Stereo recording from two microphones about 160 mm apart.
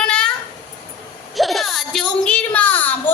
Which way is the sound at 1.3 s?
Centre (ahead or behind).